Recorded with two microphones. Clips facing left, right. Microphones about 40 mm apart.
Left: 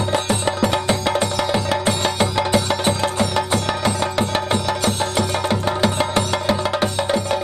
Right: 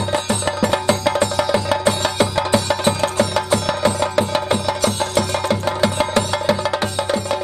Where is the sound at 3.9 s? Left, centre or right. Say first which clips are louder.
Right 2 dB; left.